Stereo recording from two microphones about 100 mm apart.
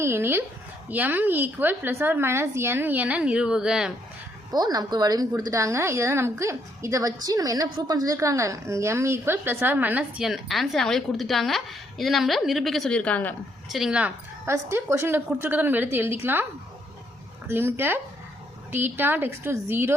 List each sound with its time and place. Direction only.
0.0 s a woman's voice: 25° right (ahead or behind); by 3.9 s 5° right (ahead or behind)
4.5 s a woman's voice: 40° right (ahead or behind); by 13.3 s 15° left (ahead or behind)
13.7 s speech: 5° right (ahead or behind)
14.4 s a woman's voice: 25° right (ahead or behind)
17.5 s a woman's voice: 25° right (ahead or behind)